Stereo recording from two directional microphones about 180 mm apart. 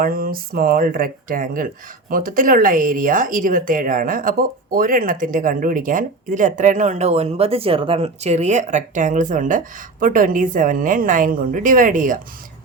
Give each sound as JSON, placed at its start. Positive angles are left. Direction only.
{"t": 0.0, "sound": "speech", "side_deg": -55}